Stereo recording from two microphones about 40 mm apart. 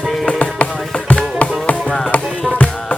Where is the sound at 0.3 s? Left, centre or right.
Left.